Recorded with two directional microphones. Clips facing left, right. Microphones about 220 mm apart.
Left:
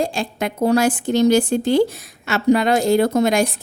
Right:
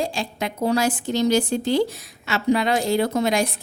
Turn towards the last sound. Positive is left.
turn(degrees=45)  # may be behind; listen again after turning